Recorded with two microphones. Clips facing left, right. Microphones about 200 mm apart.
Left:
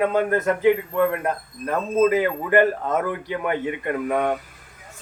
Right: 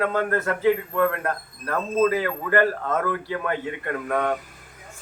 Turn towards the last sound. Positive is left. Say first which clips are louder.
# left 2 dB
turn(degrees=15)  # may be behind; listen again after turning